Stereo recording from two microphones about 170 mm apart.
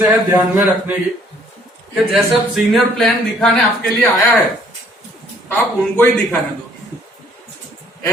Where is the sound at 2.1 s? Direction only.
Centre (ahead or behind).